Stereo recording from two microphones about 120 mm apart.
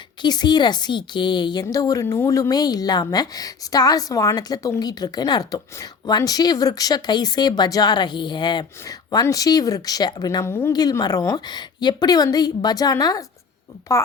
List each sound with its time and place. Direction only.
0.2 s a woman's voice: 35° left (ahead or behind)
1.6 s a woman's voice: 30° left (ahead or behind)